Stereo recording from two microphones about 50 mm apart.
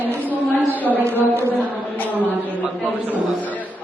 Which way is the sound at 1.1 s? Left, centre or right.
Right.